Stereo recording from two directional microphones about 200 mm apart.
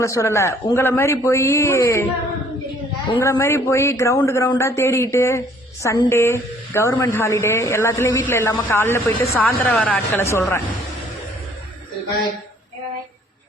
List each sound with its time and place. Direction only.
0.0 s a woman's voice: 15° left (ahead or behind)
3.1 s a woman's voice: 15° left (ahead or behind)